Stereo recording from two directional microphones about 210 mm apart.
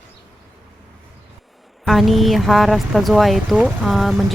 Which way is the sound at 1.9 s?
Centre (ahead or behind).